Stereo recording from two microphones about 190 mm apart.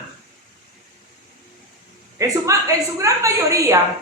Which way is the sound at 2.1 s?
15° right (ahead or behind).